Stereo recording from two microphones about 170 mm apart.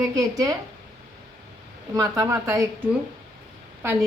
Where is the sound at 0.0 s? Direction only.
20° right (ahead or behind).